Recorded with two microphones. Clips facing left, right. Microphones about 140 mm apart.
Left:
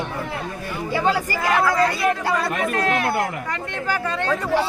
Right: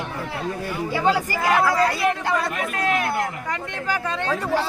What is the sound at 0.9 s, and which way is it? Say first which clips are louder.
Speech: left 1 dB; 15° right (ahead or behind).